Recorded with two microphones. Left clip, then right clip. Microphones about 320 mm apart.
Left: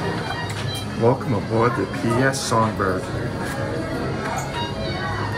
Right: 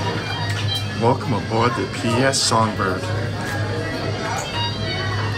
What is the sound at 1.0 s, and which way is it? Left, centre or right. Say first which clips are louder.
Speech: even; centre.